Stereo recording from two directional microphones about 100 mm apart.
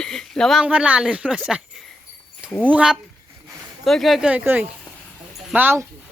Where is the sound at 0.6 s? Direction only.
10° right (ahead or behind).